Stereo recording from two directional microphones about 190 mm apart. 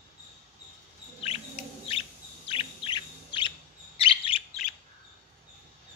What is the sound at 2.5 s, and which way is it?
Chirp, 30° left (ahead or behind).